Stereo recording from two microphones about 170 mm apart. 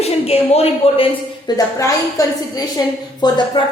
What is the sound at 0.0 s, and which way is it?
A woman's voice, 35° left (ahead or behind).